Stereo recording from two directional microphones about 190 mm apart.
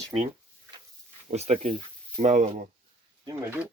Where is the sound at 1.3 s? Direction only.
35° right (ahead or behind).